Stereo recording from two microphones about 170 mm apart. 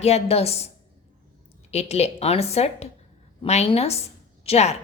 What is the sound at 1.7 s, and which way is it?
A woman's voice, 40° left (ahead or behind).